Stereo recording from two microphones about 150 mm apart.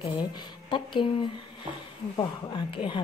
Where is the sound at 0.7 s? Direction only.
30° left (ahead or behind).